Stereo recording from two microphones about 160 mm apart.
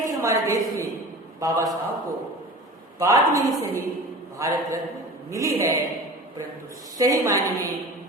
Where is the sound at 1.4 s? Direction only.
20° right (ahead or behind).